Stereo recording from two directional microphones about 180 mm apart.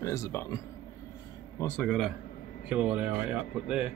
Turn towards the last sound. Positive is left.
turn(degrees=-5)  # may be behind; listen again after turning